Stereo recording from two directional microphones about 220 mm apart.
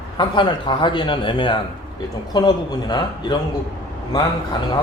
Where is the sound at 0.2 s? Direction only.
20° left (ahead or behind).